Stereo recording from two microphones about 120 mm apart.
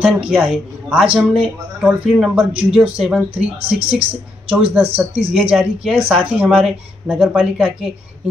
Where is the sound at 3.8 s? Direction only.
50° right (ahead or behind).